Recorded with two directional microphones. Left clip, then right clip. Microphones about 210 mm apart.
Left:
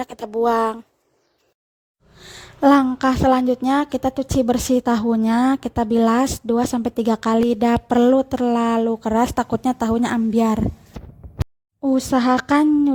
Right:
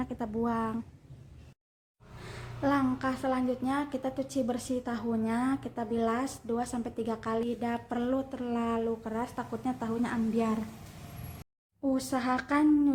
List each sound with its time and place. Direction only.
0.0 s a woman's voice: 45° left (ahead or behind)
2.2 s a woman's voice: 45° left (ahead or behind)
11.9 s a woman's voice: 40° left (ahead or behind)